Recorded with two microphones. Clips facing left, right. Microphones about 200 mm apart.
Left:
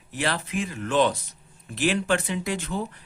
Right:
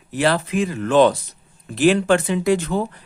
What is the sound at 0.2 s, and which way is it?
Speech, 90° right.